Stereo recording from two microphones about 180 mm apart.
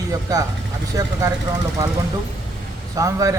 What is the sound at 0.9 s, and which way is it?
Speech, 20° right (ahead or behind).